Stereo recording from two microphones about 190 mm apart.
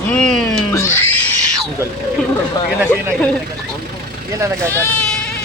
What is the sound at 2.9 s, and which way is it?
Speech, 10° left (ahead or behind).